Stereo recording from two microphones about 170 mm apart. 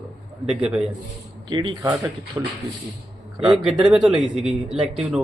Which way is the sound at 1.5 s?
25° right (ahead or behind).